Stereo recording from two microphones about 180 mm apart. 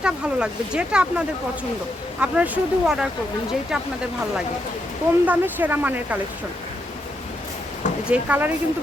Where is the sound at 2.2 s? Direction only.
5° right (ahead or behind).